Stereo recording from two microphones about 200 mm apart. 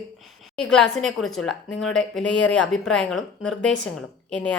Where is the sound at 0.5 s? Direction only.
5° left (ahead or behind).